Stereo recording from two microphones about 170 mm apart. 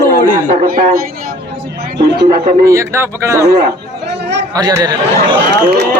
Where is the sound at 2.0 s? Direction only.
85° right.